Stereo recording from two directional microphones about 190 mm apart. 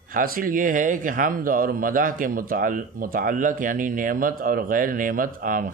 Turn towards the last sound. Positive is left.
turn(degrees=-45)  # may be behind; listen again after turning